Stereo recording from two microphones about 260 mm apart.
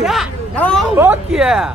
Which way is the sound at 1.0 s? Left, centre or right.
Centre.